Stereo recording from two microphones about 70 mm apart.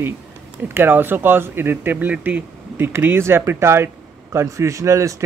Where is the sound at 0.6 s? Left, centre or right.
Right.